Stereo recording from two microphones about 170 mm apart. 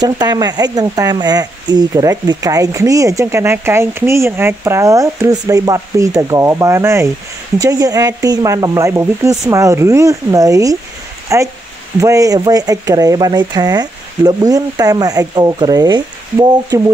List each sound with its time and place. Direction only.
0.0 s speech: 25° right (ahead or behind)